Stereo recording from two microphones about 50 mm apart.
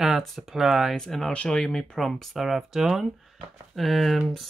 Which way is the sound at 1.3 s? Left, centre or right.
Left.